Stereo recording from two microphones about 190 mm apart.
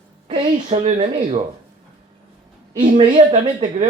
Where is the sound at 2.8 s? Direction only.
40° right (ahead or behind).